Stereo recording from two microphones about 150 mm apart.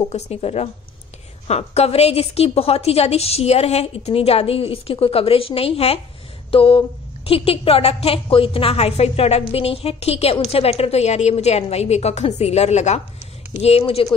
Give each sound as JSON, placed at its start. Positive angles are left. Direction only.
{"t": 0.1, "sound": "a woman's voice", "side_deg": 45}